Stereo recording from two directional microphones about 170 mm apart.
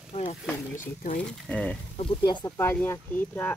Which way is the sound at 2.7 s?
10° left (ahead or behind).